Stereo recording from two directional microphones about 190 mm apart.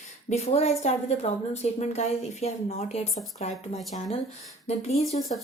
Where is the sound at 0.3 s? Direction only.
35° left (ahead or behind).